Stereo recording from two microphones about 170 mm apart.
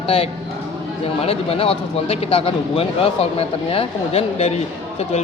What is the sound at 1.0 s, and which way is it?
Speech, 35° left (ahead or behind).